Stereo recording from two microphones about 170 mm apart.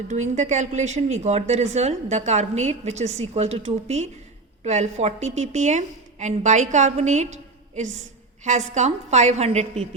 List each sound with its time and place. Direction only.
0.1 s a woman's voice: 45° right (ahead or behind)
8.4 s a woman's voice: 45° right (ahead or behind)